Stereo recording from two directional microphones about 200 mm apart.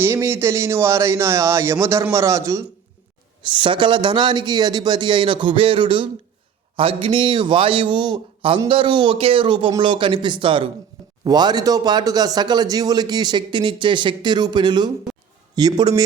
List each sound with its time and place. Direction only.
0.0 s a man's voice: 15° right (ahead or behind)